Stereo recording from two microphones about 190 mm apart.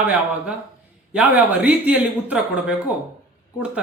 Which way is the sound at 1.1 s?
5° right (ahead or behind).